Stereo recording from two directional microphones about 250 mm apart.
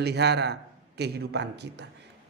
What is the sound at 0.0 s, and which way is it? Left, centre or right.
A man's voice, right.